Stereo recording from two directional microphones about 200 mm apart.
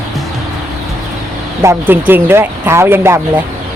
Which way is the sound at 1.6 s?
10° right (ahead or behind).